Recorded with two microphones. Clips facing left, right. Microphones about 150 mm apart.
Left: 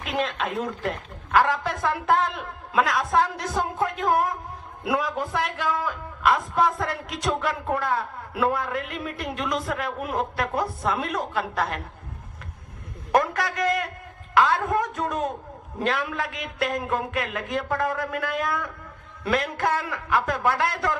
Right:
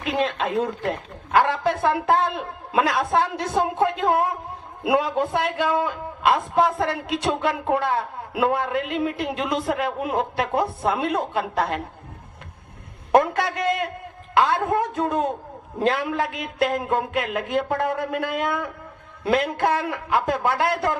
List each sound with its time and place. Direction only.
0.0 s a man's voice: 30° right (ahead or behind)
13.1 s a sound: 25° right (ahead or behind)
14.3 s a man's voice: 25° right (ahead or behind)